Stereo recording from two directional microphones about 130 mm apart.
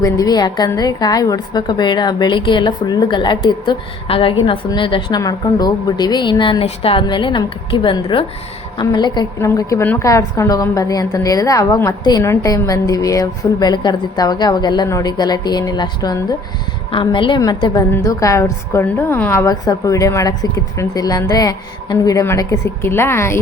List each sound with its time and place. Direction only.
0.0 s a woman's voice: 30° left (ahead or behind)
16.9 s a woman's voice: 40° left (ahead or behind); by 23.4 s 20° left (ahead or behind)